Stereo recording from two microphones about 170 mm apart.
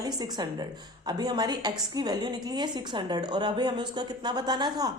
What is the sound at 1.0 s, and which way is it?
A woman's voice, 25° right (ahead or behind).